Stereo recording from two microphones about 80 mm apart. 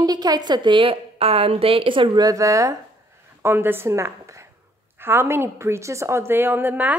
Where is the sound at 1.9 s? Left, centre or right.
Right.